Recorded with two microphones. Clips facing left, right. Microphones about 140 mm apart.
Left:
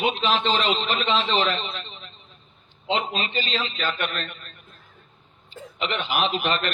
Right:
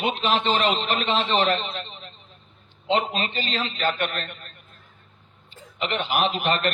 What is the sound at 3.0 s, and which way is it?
A man's voice, 50° right (ahead or behind).